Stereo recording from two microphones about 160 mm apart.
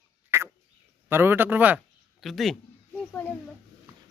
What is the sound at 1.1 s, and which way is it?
Speech, 15° right (ahead or behind).